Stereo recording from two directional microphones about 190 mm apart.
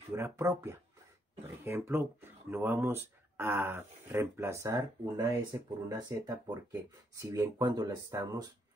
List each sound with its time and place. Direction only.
0.1 s speech: 15° right (ahead or behind)